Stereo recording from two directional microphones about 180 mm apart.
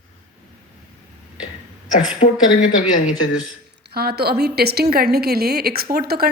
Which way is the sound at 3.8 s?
60° right (ahead or behind).